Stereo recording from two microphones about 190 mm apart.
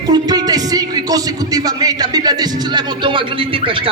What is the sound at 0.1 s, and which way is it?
A man's voice, 20° right (ahead or behind).